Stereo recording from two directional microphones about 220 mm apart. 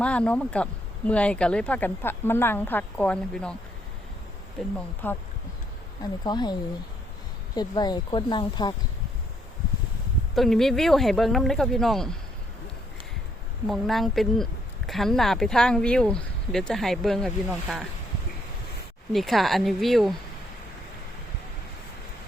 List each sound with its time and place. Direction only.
0.0 s speech: 5° left (ahead or behind)
4.6 s speech: 5° left (ahead or behind)
6.2 s speech: 20° left (ahead or behind)
10.3 s speech: centre (ahead or behind)
13.7 s speech: centre (ahead or behind)
19.1 s speech: centre (ahead or behind)